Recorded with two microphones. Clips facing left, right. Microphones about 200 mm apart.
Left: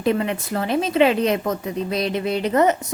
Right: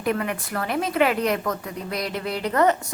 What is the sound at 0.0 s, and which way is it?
A woman's voice, 25° left (ahead or behind).